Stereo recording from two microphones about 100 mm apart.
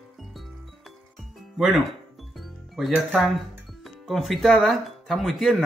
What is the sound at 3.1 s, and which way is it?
Speech, centre (ahead or behind).